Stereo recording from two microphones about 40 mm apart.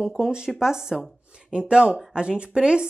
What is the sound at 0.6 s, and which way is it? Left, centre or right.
A woman's voice, centre.